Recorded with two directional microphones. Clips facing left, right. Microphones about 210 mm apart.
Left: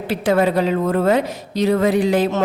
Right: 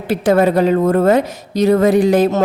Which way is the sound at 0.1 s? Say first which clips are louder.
Right 4 dB; 45° right (ahead or behind).